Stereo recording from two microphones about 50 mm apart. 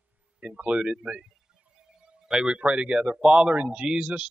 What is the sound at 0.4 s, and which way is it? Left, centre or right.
A man's voice, right.